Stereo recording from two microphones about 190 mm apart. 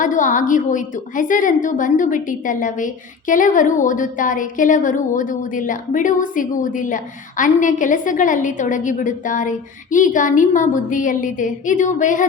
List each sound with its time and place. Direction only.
0.0 s a woman's voice: 45° left (ahead or behind)